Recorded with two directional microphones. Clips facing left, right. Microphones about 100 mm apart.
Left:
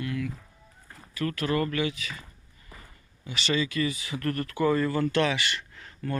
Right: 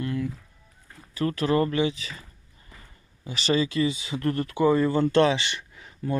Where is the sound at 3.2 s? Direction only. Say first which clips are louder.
Right 4 dB; 35° right (ahead or behind).